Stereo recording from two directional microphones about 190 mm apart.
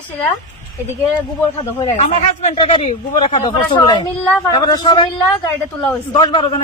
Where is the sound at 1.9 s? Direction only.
35° left (ahead or behind).